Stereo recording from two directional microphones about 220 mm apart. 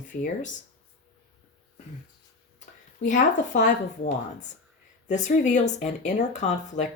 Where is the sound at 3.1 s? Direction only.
35° left (ahead or behind).